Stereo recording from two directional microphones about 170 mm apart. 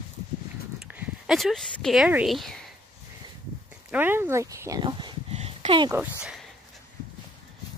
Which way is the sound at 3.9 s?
10° right (ahead or behind).